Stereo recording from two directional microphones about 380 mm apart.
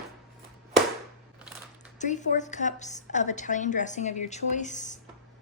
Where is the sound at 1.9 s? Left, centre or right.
Centre.